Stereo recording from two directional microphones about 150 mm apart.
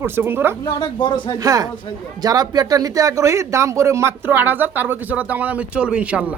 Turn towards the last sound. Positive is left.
turn(degrees=-10)  # may be behind; listen again after turning